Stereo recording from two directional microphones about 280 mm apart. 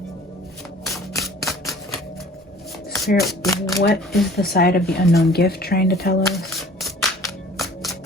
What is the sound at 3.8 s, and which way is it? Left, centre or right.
Speech, left.